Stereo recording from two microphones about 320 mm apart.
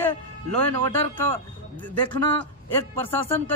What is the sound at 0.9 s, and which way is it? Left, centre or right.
Speech, centre.